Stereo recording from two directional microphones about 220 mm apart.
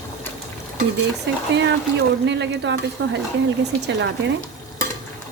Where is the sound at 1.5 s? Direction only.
55° right (ahead or behind).